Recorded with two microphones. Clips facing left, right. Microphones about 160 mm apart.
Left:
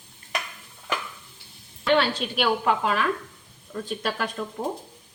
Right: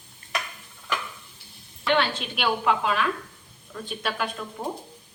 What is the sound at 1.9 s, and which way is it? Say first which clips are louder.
A woman's voice: left 2 dB; 35° left (ahead or behind).